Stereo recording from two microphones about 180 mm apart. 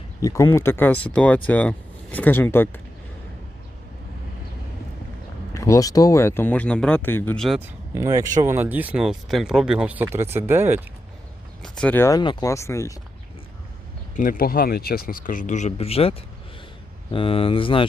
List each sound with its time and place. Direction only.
0.2 s speech: 20° left (ahead or behind)
5.5 s speech: 20° left (ahead or behind)
7.9 s speech: 20° right (ahead or behind)
11.6 s speech: 5° left (ahead or behind)
14.2 s speech: 55° left (ahead or behind); by 17.8 s 30° left (ahead or behind)